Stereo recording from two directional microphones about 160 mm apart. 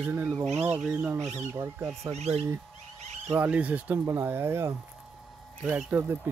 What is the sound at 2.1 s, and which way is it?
Speech, 40° right (ahead or behind).